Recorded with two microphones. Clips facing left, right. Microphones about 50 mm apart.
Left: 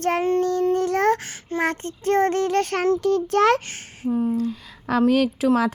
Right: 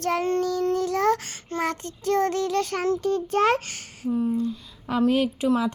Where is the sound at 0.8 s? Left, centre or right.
Left.